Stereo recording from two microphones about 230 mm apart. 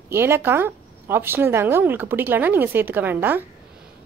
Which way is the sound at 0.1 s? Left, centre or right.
Centre.